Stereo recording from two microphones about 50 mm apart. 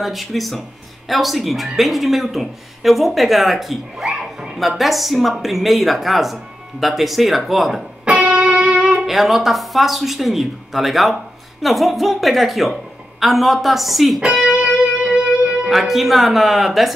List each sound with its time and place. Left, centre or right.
0.0 s a woman's voice: centre
4.1 s a sound: centre
4.6 s a woman's voice: centre
8.0 s music: right
9.0 s a woman's voice: centre
14.5 s music: right
15.7 s a woman's voice: centre